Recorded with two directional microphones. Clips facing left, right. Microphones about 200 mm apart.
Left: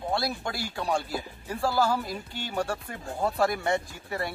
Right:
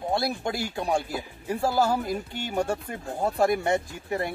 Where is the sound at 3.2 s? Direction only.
20° right (ahead or behind).